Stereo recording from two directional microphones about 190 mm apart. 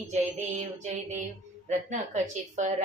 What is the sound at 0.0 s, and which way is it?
Speech, 40° right (ahead or behind).